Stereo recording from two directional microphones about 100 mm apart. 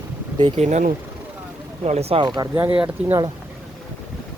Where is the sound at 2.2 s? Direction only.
45° right (ahead or behind).